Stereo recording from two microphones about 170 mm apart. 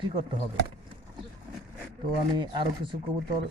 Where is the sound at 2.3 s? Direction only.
30° right (ahead or behind).